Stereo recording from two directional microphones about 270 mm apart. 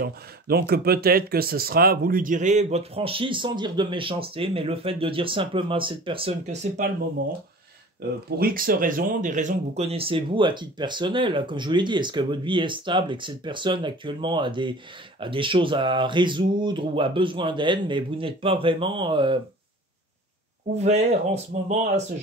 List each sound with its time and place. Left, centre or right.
0.0 s speech: right
8.4 s speech: right
20.7 s speech: right